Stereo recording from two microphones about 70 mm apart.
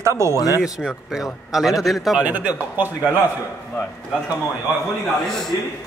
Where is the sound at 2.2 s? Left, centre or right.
Right.